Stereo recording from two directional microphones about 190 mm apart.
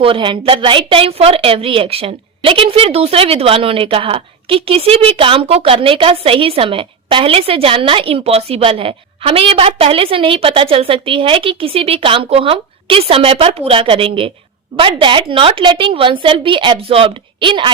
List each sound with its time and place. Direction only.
0.0 s a woman's voice: 25° right (ahead or behind)